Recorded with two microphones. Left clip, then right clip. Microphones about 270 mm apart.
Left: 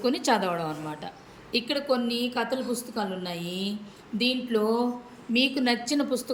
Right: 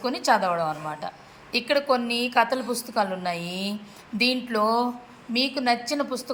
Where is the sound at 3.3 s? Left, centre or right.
Right.